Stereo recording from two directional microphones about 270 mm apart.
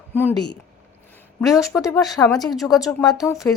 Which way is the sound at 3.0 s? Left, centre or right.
Centre.